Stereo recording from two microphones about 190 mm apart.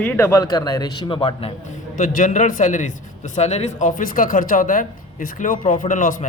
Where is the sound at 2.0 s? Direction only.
45° left (ahead or behind).